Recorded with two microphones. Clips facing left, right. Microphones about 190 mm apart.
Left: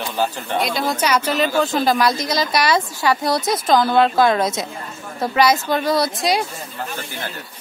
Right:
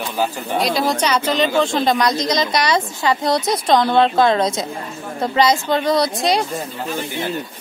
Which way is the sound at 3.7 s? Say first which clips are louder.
Right 1 dB; centre (ahead or behind).